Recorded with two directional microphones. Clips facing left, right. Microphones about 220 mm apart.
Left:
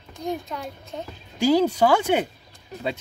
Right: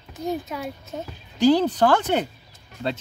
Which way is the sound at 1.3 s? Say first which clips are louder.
Right 1 dB; 10° left (ahead or behind).